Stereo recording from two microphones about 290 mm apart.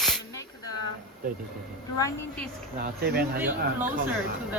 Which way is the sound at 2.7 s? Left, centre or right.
Right.